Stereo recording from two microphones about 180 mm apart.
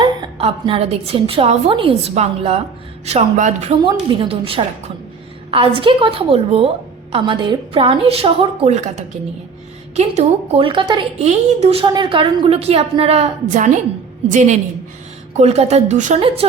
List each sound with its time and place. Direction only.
0.0 s a woman's voice: 30° right (ahead or behind)
3.8 s a woman's voice: 30° right (ahead or behind)